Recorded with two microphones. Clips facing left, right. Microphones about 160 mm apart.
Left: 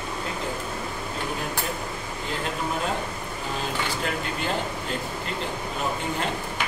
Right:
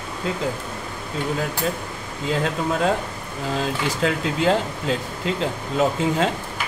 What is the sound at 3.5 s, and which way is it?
Speech, 90° right.